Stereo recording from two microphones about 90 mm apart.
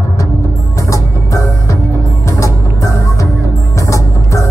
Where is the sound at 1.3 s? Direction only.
35° left (ahead or behind).